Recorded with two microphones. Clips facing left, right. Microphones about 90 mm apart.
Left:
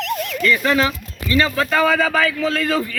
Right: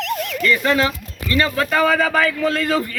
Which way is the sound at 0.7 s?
20° left (ahead or behind).